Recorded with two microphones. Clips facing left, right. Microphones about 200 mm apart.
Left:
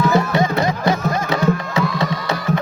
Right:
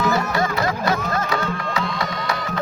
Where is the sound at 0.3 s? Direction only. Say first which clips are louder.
Left 4 dB; 20° left (ahead or behind).